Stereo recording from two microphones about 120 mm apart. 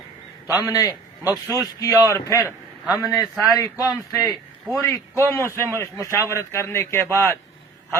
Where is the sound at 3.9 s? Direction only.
30° left (ahead or behind).